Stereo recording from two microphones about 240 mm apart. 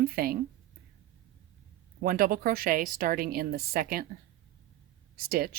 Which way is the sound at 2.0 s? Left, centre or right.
Right.